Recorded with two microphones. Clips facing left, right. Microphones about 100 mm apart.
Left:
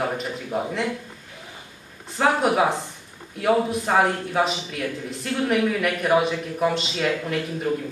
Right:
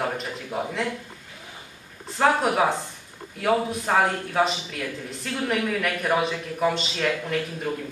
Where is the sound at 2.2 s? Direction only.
Centre (ahead or behind).